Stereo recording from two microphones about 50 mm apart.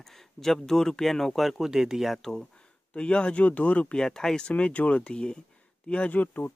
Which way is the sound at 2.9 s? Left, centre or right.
Left.